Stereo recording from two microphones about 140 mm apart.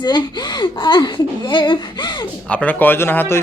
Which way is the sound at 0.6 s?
35° left (ahead or behind).